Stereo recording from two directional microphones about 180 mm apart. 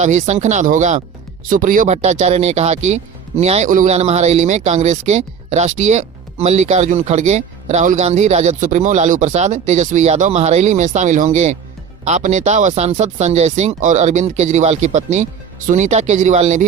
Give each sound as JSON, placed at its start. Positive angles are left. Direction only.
{"t": 0.0, "sound": "speech", "side_deg": -40}